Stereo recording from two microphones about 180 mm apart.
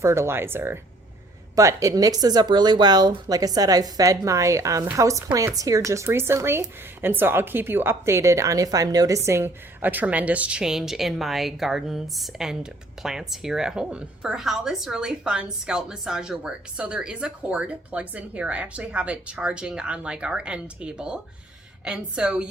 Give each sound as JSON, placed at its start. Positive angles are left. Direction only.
{"t": 0.0, "sound": "a woman's voice", "side_deg": -15}